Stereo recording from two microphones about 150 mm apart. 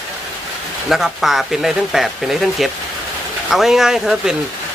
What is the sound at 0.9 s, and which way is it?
Speech, centre (ahead or behind).